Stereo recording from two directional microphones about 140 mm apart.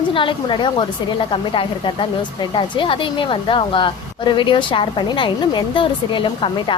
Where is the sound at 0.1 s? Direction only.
35° left (ahead or behind).